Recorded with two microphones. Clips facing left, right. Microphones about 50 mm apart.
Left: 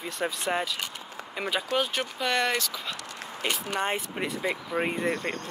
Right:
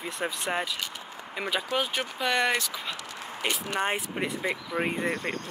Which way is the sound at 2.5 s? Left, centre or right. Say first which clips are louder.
Right 1 dB; centre.